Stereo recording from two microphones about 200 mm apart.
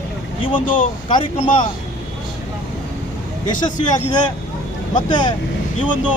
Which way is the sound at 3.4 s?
20° left (ahead or behind).